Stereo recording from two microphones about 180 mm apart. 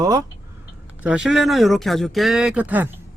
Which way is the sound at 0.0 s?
20° right (ahead or behind).